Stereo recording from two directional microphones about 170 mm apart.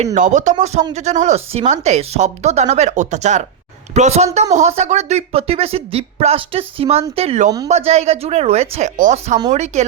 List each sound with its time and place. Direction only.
0.0 s speech: 45° right (ahead or behind)